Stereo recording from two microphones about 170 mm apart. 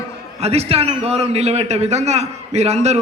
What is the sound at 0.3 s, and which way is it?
A man's voice, 40° right (ahead or behind).